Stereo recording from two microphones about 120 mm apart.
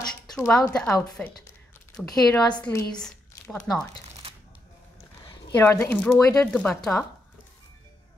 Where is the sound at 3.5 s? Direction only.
5° left (ahead or behind).